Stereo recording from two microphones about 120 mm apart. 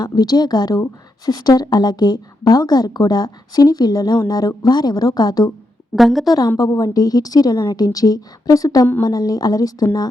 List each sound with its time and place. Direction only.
0.0 s a woman's voice: 35° left (ahead or behind)
6.0 s a woman's voice: centre (ahead or behind)
6.6 s a woman's voice: 30° left (ahead or behind)